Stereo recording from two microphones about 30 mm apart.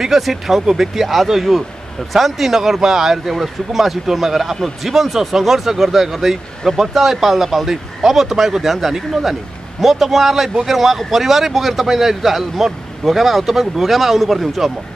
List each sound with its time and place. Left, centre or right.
0.2 s speech: centre
1.0 s speech: centre
9.8 s speech: centre